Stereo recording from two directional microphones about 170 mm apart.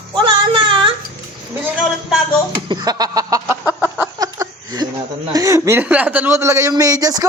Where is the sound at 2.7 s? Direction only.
25° right (ahead or behind).